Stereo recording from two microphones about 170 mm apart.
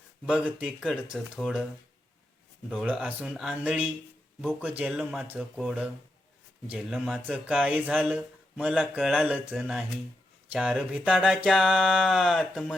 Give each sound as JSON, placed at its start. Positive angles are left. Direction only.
{"t": 0.3, "sound": "speech", "side_deg": -5}
{"t": 2.6, "sound": "speech", "side_deg": -5}